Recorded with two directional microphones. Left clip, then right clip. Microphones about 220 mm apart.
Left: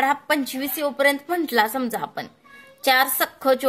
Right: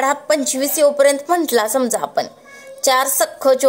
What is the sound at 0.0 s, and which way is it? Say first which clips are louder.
A woman's voice: right 4 dB; 50° left (ahead or behind).